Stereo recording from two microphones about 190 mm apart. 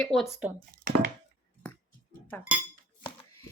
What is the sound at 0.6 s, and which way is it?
Speech, 50° right (ahead or behind).